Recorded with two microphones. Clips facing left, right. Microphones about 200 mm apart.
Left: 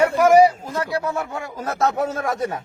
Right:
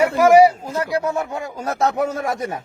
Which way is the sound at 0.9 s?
20° right (ahead or behind).